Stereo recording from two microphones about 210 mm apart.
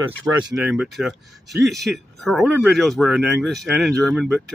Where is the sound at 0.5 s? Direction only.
5° right (ahead or behind).